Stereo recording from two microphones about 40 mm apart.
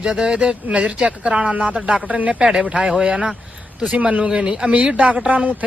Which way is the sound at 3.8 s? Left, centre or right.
Right.